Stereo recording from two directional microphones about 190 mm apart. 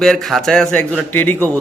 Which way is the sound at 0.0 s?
Centre (ahead or behind).